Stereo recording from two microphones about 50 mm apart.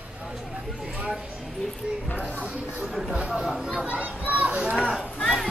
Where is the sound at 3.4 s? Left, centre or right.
Centre.